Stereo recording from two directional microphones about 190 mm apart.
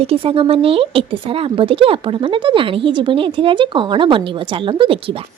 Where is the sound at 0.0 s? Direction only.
30° right (ahead or behind).